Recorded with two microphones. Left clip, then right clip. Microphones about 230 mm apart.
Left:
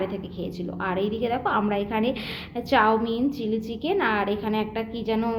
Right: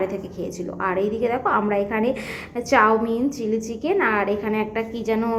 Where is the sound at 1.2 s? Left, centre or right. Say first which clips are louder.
Right 3 dB; centre.